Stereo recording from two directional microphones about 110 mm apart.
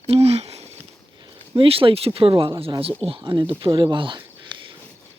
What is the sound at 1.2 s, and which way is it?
Speech, 55° right (ahead or behind).